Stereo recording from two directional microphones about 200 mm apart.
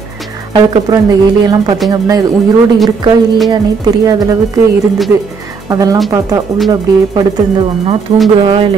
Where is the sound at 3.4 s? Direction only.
20° right (ahead or behind).